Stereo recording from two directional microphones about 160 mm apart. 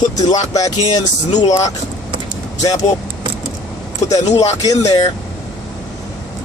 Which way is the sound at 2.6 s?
20° left (ahead or behind).